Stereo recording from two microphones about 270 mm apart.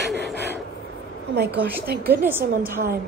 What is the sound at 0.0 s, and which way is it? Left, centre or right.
Gasp, right.